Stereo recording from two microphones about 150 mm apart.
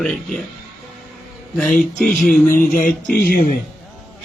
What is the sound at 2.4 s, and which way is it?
Music, 65° left (ahead or behind).